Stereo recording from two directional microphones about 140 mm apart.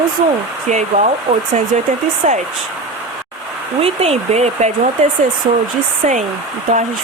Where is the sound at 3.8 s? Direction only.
45° right (ahead or behind).